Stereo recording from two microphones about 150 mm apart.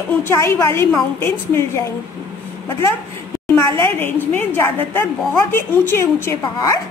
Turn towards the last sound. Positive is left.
turn(degrees=20)  # may be behind; listen again after turning